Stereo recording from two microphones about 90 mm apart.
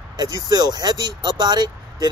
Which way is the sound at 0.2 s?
50° right (ahead or behind).